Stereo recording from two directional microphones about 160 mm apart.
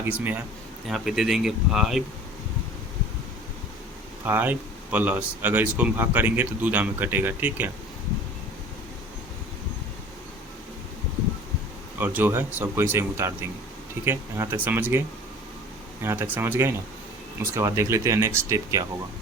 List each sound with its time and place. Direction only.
0.0 s speech: 10° right (ahead or behind)
4.3 s speech: 10° right (ahead or behind)
11.9 s speech: 10° right (ahead or behind)